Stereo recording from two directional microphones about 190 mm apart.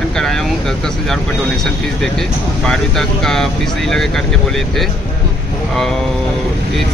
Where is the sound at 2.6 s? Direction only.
5° left (ahead or behind).